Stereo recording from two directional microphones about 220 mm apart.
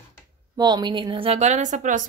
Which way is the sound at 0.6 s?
20° right (ahead or behind).